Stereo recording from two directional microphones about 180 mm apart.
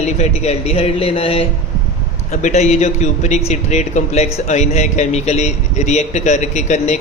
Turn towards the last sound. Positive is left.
turn(degrees=40)  # may be behind; listen again after turning